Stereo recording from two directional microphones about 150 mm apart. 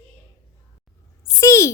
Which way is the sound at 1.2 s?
20° left (ahead or behind).